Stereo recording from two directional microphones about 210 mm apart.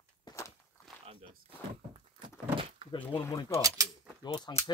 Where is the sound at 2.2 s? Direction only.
25° right (ahead or behind).